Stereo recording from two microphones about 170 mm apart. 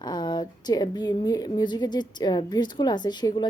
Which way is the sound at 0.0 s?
25° left (ahead or behind).